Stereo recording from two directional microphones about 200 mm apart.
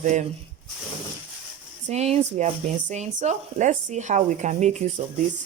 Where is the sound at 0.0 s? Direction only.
35° right (ahead or behind).